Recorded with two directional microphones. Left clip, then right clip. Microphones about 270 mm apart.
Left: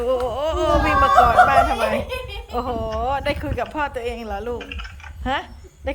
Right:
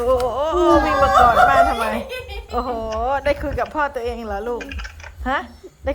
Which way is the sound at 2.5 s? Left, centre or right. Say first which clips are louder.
Right 1 dB; centre.